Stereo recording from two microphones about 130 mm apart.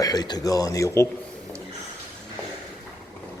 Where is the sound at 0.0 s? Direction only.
30° left (ahead or behind).